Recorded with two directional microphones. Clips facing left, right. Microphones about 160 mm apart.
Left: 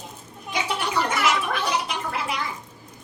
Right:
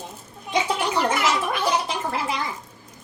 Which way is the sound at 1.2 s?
30° right (ahead or behind).